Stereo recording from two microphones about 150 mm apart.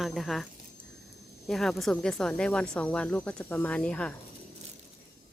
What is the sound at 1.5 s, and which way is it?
Speech, centre (ahead or behind).